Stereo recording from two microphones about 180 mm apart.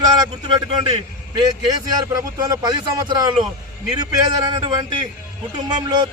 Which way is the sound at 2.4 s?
20° right (ahead or behind).